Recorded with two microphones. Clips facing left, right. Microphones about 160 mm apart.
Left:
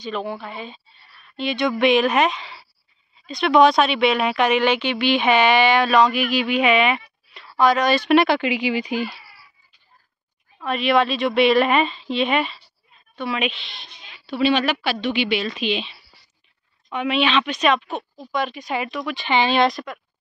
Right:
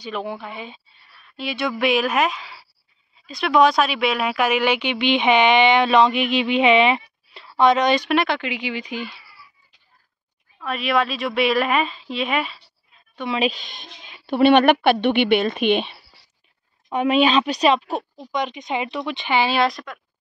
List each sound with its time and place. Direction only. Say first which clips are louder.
0.0 s a woman's voice: left 1 dB; 10° right (ahead or behind)
8.1 s speech: left 5 dB; 5° left (ahead or behind)
8.9 s speech: left 5 dB; 40° left (ahead or behind)
10.6 s a woman's voice: left 3 dB; centre (ahead or behind)
13.3 s a woman's voice: right 4 dB; 35° right (ahead or behind); by 16.0 s 55° right (ahead or behind)
16.9 s a woman's voice: right 3 dB; 40° right (ahead or behind)
18.3 s speech: even; 20° right (ahead or behind)
19.2 s a woman's voice: left 2 dB; 5° right (ahead or behind)